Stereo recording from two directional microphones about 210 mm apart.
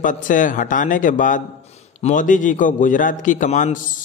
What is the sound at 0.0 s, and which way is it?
A man's voice, 40° left (ahead or behind).